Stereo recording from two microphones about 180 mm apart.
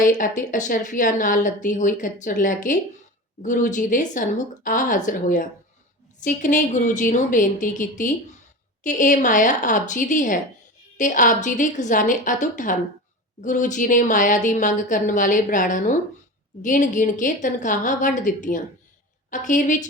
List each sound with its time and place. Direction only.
0.0 s a woman's voice: 50° left (ahead or behind)